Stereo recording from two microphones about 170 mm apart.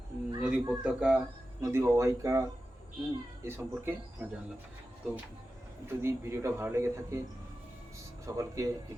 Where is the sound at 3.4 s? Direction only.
15° right (ahead or behind).